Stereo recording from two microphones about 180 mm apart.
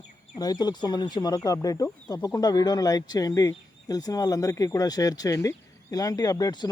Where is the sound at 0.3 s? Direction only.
20° left (ahead or behind).